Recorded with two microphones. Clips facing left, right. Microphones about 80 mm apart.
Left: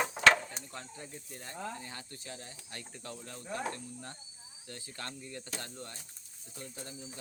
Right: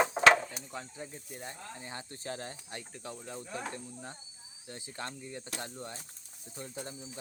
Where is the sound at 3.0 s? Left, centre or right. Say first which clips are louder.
Right 3 dB; centre.